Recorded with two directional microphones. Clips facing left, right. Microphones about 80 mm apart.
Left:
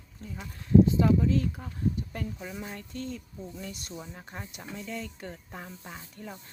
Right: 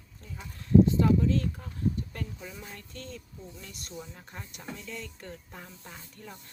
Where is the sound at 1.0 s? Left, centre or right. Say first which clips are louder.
Left 1 dB; centre.